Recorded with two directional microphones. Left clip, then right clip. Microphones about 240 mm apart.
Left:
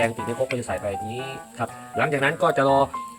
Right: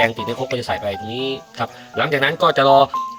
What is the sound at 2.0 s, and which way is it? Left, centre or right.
Speech, centre.